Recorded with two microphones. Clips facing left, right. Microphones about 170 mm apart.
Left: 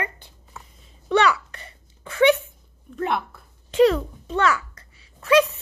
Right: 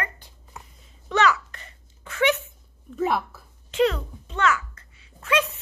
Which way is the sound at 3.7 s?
40° left (ahead or behind).